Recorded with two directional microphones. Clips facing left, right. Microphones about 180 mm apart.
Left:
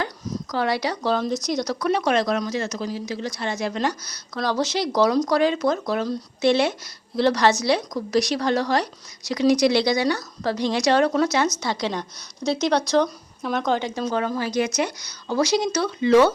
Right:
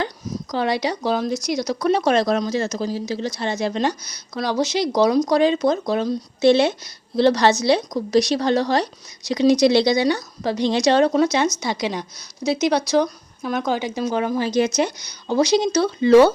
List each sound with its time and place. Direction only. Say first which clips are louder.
0.5 s speech: right 2 dB; 20° right (ahead or behind)
1.2 s speech: right 1 dB; centre (ahead or behind)
1.8 s a woman's voice: right 4 dB; 30° right (ahead or behind)